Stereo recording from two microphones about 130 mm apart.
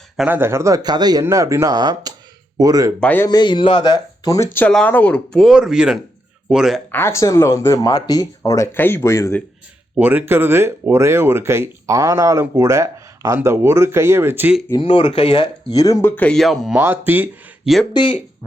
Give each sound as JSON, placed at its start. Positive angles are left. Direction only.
{"t": 0.3, "sound": "speech", "side_deg": -15}
{"t": 3.0, "sound": "speech", "side_deg": 15}
{"t": 3.2, "sound": "speech", "side_deg": 35}
{"t": 4.7, "sound": "speech", "side_deg": 10}
{"t": 5.4, "sound": "speech", "side_deg": -5}
{"t": 6.9, "sound": "speech", "side_deg": 20}
{"t": 9.9, "sound": "speech", "side_deg": -10}
{"t": 14.8, "sound": "speech", "side_deg": 45}
{"t": 15.7, "sound": "speech", "side_deg": 25}
{"t": 16.4, "sound": "speech", "side_deg": 0}
{"t": 16.7, "sound": "speech", "side_deg": -15}
{"t": 17.9, "sound": "speech", "side_deg": 40}